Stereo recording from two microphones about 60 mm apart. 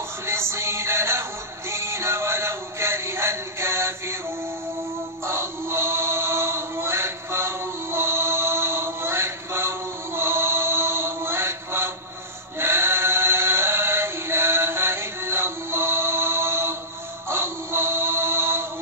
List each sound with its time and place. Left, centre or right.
0.3 s music: right
5.2 s music: right
12.5 s a sound: right
17.3 s synthetic singing: right